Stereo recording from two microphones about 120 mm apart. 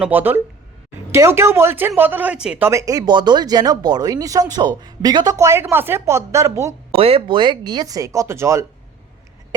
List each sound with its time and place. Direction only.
0.0 s speech: 15° right (ahead or behind)
2.6 s speech: 25° right (ahead or behind)
3.1 s speech: 40° right (ahead or behind)
6.9 s speech: 55° right (ahead or behind); by 8.6 s 25° right (ahead or behind)